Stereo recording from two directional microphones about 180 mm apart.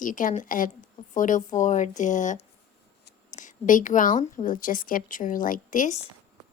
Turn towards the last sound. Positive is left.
turn(degrees=45)  # may be behind; listen again after turning